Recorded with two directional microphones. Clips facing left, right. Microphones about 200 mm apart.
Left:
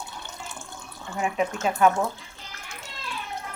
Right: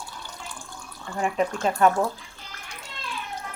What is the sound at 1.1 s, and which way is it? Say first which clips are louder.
Speech: right 1 dB; 5° left (ahead or behind).